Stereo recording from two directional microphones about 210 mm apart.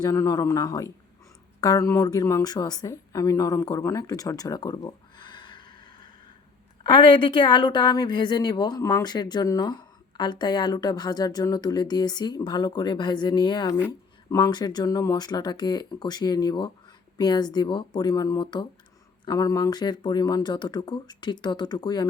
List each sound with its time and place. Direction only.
0.0 s a woman's voice: 15° left (ahead or behind)